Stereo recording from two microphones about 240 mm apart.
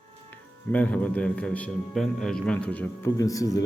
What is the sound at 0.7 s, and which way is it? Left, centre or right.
A man's voice, centre.